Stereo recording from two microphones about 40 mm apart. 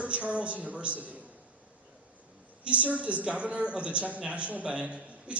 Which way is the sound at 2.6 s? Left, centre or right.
Right.